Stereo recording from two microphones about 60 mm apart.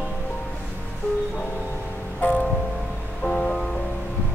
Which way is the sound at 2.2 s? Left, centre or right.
Left.